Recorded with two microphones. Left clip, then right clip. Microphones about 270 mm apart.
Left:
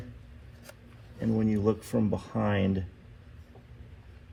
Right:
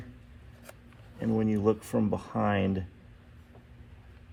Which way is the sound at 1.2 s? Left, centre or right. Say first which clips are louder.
Even; right.